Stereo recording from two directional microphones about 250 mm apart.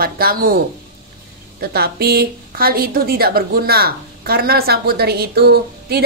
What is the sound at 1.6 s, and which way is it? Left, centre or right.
A woman's voice, right.